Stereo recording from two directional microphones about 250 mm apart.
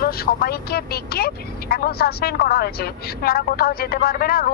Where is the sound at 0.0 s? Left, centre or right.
Left.